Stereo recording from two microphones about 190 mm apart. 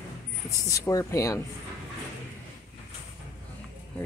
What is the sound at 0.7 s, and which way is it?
Speech, 15° left (ahead or behind).